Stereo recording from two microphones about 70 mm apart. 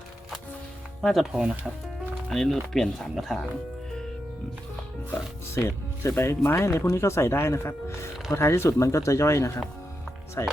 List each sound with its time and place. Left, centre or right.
1.0 s speech: centre
1.3 s speech: centre
2.3 s speech: centre
5.1 s speech: left